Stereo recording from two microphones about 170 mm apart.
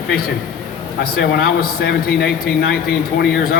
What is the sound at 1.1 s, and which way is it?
Speech, 65° left (ahead or behind).